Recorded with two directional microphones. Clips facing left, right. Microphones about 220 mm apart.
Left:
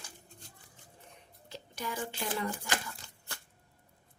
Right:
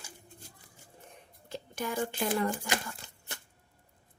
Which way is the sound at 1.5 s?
50° right (ahead or behind).